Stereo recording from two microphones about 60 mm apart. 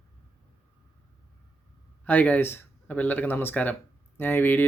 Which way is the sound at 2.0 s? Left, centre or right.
Left.